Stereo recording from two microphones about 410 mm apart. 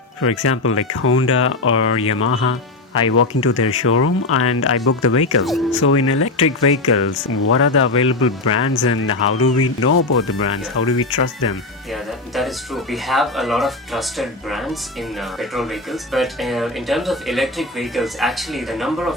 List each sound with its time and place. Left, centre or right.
0.2 s speech: left
12.3 s speech: centre